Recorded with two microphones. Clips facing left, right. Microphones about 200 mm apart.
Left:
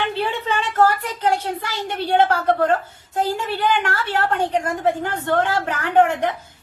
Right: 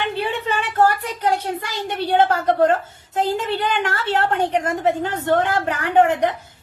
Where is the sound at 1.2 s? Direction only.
15° right (ahead or behind).